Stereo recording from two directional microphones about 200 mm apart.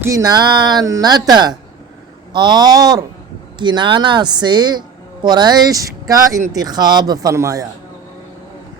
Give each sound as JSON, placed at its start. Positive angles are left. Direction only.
{"t": 0.0, "sound": "speech", "side_deg": -15}